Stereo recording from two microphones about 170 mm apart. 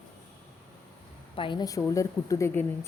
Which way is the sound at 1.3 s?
25° left (ahead or behind).